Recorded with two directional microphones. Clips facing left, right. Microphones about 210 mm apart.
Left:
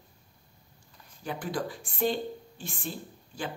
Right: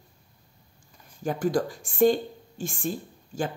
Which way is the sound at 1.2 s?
45° right (ahead or behind).